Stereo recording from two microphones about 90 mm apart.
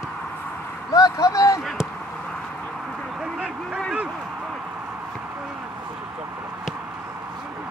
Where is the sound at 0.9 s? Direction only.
45° left (ahead or behind).